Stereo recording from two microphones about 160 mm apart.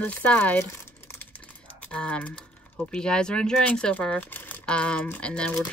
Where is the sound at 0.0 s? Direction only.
10° left (ahead or behind).